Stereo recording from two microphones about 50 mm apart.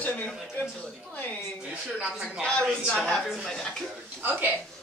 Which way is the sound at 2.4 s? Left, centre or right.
Centre.